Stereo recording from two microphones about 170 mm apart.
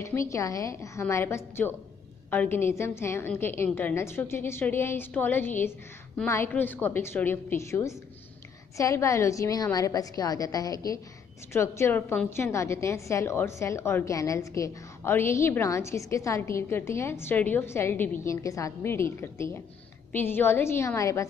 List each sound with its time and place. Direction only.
0.0 s a woman's voice: 15° left (ahead or behind)